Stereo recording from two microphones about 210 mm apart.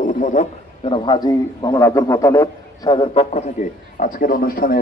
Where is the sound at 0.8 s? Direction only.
20° left (ahead or behind).